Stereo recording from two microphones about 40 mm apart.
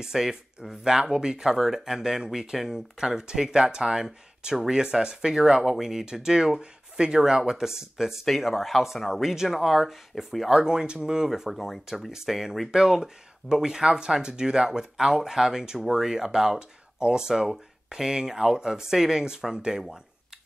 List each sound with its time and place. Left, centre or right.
0.0 s speech: centre
8.3 s speech: centre
10.5 s speech: centre